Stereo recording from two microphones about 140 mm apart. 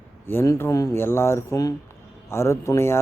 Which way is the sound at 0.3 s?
20° left (ahead or behind).